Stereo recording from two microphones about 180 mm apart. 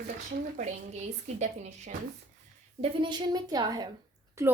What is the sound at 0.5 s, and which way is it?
A woman's voice, 40° right (ahead or behind).